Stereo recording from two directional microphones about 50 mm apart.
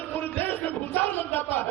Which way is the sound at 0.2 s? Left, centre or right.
Left.